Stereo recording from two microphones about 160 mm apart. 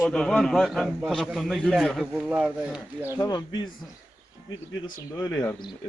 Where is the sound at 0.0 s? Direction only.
Centre (ahead or behind).